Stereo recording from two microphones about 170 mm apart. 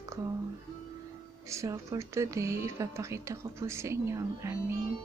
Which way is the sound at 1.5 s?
15° right (ahead or behind).